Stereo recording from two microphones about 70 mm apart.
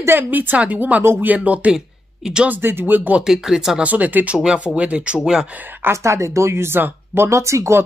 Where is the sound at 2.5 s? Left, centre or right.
Right.